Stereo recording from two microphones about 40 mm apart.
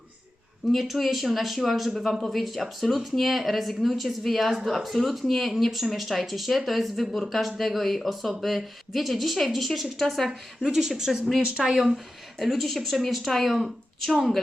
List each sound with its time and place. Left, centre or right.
0.7 s speech: centre
10.6 s speech: centre
12.4 s speech: centre